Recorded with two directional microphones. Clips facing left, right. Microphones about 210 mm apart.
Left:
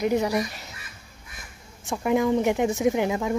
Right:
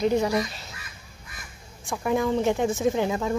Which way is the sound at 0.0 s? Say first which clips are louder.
Even; 15° left (ahead or behind).